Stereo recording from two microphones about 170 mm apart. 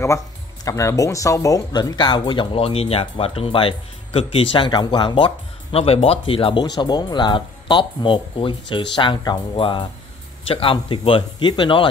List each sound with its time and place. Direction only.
0.7 s speech: 20° left (ahead or behind)